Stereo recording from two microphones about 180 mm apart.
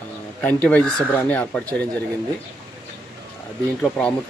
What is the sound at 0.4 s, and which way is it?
Speech, 10° left (ahead or behind).